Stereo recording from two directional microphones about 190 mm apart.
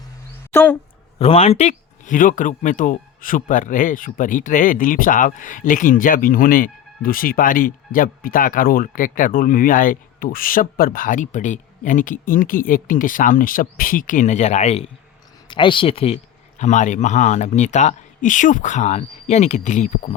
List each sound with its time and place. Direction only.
0.5 s speech: 10° left (ahead or behind)
1.2 s speech: 30° left (ahead or behind)